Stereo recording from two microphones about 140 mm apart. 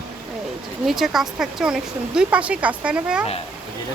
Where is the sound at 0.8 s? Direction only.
Centre (ahead or behind).